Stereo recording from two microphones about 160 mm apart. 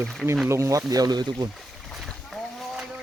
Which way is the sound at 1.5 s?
Centre (ahead or behind).